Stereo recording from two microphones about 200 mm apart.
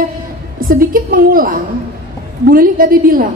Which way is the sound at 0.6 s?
45° right (ahead or behind).